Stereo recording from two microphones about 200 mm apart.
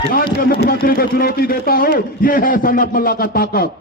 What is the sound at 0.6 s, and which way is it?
A man's voice, 50° left (ahead or behind).